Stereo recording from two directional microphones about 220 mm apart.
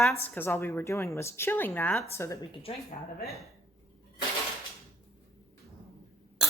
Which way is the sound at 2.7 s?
25° left (ahead or behind).